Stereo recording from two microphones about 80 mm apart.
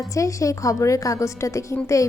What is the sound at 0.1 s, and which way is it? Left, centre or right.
A woman's voice, left.